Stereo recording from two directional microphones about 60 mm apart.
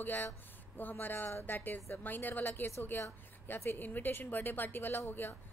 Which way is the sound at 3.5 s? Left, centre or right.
Left.